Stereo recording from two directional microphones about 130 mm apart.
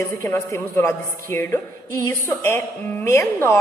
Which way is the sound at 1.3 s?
15° left (ahead or behind).